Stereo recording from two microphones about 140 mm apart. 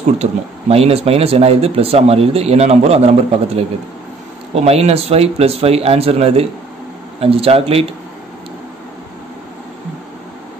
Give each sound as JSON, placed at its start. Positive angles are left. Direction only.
{"t": 0.2, "sound": "speech", "side_deg": -45}